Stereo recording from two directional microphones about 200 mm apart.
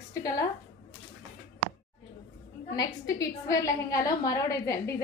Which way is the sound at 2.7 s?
15° left (ahead or behind).